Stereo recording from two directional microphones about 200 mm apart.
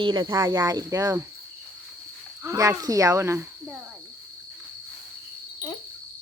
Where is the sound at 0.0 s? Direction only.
20° right (ahead or behind).